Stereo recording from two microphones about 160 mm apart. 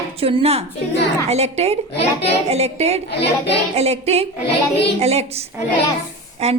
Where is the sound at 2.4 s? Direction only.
40° right (ahead or behind).